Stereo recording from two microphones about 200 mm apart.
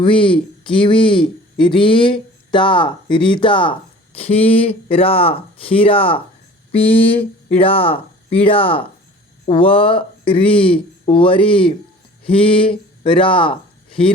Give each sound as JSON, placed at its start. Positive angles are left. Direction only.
{"t": 0.0, "sound": "speech", "side_deg": 25}